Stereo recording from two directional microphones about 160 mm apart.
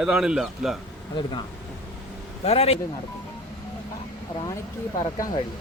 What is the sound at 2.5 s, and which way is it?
Speech, 40° left (ahead or behind).